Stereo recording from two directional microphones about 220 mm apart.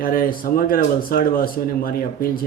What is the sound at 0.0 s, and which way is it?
Speech, 40° left (ahead or behind).